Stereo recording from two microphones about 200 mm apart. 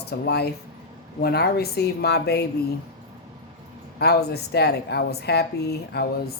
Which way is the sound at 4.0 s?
55° left (ahead or behind).